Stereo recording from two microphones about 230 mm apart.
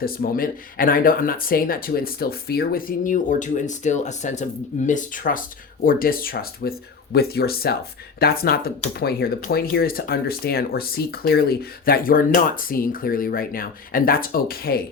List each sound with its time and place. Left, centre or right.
0.0 s speech: left